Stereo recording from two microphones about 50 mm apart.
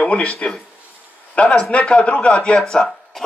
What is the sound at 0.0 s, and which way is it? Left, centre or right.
Speech, left.